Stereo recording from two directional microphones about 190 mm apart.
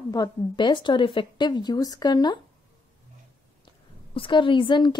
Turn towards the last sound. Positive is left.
turn(degrees=25)  # may be behind; listen again after turning